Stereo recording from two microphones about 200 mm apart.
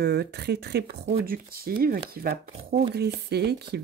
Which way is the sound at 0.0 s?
55° right (ahead or behind).